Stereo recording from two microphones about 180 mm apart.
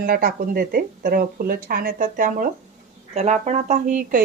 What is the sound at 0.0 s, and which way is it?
Speech, 55° right (ahead or behind).